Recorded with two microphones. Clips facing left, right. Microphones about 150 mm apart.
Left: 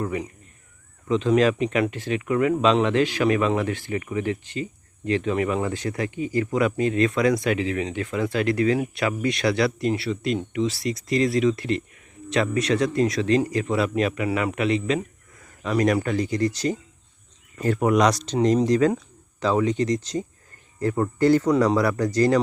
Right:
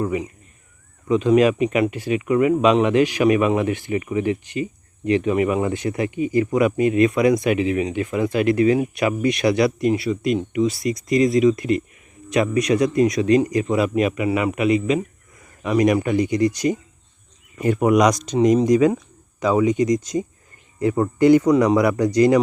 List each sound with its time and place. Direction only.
0.0 s speech: 10° right (ahead or behind)